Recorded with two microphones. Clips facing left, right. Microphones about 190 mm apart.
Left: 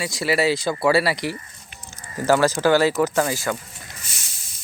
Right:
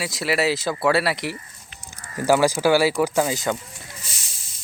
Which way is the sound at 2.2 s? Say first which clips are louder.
Even; 10° right (ahead or behind).